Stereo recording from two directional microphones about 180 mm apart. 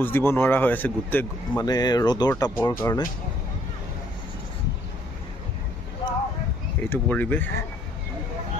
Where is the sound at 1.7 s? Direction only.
20° left (ahead or behind).